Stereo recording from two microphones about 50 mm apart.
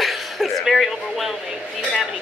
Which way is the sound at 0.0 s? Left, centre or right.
Centre.